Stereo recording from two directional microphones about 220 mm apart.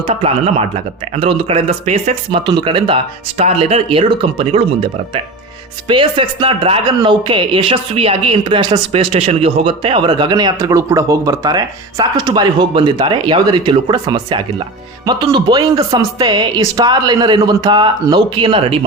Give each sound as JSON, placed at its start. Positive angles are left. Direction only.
{"t": 0.0, "sound": "speech", "side_deg": -25}
{"t": 5.9, "sound": "speech", "side_deg": -20}